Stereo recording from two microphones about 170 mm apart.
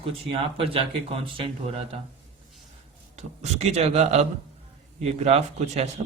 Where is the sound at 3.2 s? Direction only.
40° right (ahead or behind).